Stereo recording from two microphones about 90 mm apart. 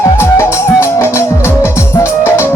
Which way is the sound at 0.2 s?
30° left (ahead or behind).